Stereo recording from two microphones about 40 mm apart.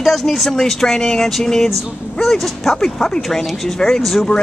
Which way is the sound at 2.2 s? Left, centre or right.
Centre.